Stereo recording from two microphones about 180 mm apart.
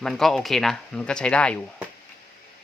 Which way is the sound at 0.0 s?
Centre (ahead or behind).